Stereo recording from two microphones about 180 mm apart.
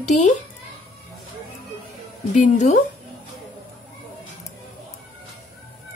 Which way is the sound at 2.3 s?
40° left (ahead or behind).